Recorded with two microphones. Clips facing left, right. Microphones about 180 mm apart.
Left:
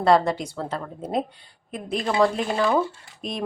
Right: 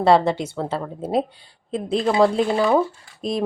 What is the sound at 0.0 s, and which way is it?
A woman's voice, 25° right (ahead or behind).